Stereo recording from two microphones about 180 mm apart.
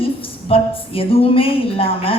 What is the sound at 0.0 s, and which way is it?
A woman's voice, 30° left (ahead or behind).